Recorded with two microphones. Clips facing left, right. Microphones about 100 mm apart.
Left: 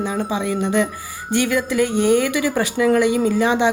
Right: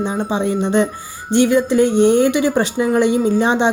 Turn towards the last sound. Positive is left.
turn(degrees=-25)  # may be behind; listen again after turning